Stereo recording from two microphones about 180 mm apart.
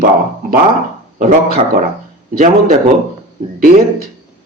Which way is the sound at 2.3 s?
55° right (ahead or behind).